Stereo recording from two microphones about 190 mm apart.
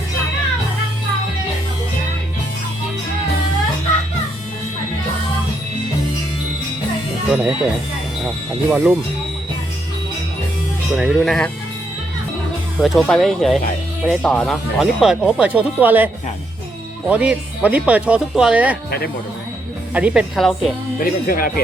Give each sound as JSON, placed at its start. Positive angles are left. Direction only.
{"t": 7.3, "sound": "speech", "side_deg": -5}
{"t": 8.7, "sound": "speech", "side_deg": -5}
{"t": 10.9, "sound": "speech", "side_deg": 0}
{"t": 12.8, "sound": "speech", "side_deg": 0}
{"t": 17.1, "sound": "speech", "side_deg": -5}
{"t": 18.9, "sound": "speech", "side_deg": 55}
{"t": 19.9, "sound": "speech", "side_deg": -5}
{"t": 21.0, "sound": "speech", "side_deg": 50}